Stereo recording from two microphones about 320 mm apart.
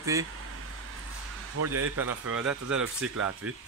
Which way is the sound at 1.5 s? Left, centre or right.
Right.